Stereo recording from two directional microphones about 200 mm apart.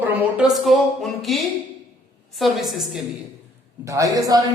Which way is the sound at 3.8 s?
15° right (ahead or behind).